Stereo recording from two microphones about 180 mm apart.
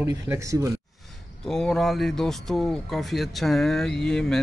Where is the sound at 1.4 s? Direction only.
5° left (ahead or behind).